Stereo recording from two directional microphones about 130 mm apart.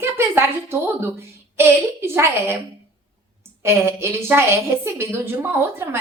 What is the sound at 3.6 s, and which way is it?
A woman's voice, 20° right (ahead or behind).